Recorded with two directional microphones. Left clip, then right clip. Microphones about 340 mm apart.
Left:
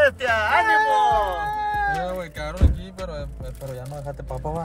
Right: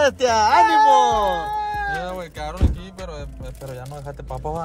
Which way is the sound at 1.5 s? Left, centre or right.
Right.